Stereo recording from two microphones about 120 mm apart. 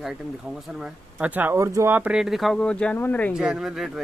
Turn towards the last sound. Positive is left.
turn(degrees=-5)  # may be behind; listen again after turning